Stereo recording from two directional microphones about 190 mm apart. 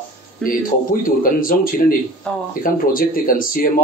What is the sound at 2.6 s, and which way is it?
Speech, 50° left (ahead or behind).